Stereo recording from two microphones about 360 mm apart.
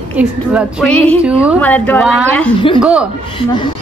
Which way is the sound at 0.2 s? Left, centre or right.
Centre.